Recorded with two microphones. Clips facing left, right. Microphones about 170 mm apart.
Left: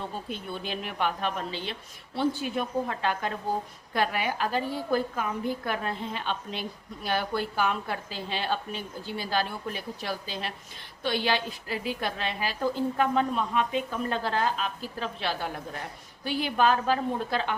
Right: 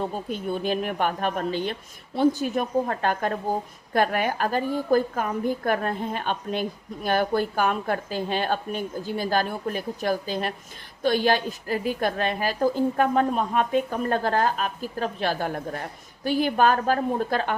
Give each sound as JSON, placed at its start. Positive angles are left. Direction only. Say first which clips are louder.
{"t": 0.0, "sound": "a woman's voice", "louder": "right 7 dB", "side_deg": -45}